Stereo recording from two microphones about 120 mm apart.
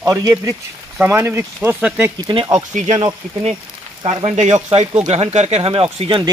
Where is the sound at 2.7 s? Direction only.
90° right.